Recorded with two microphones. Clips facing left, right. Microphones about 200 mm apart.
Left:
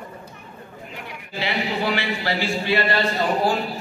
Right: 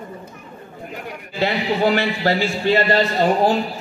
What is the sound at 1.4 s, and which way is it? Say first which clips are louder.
A man's voice: right 5 dB; 45° right (ahead or behind).